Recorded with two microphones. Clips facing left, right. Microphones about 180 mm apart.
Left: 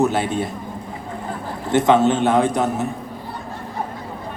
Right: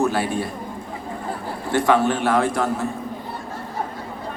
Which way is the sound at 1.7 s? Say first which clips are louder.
Left 3 dB; 20° left (ahead or behind).